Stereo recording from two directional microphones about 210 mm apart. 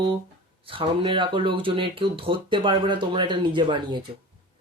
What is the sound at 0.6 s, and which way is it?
Speech, 25° right (ahead or behind).